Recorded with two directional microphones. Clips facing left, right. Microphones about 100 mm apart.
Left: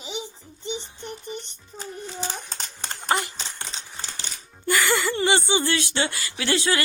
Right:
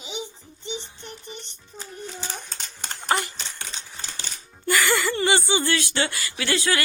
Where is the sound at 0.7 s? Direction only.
Centre (ahead or behind).